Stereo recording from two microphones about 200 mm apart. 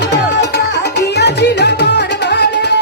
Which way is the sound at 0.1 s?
55° left (ahead or behind).